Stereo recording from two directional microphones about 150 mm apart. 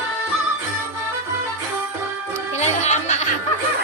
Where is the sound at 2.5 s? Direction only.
50° left (ahead or behind).